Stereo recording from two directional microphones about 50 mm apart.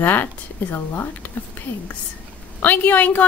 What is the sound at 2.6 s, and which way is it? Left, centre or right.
Speech, left.